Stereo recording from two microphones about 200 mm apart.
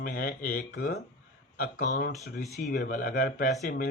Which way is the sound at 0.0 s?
50° left (ahead or behind).